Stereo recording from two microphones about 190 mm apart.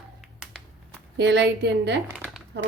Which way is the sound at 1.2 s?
65° right (ahead or behind).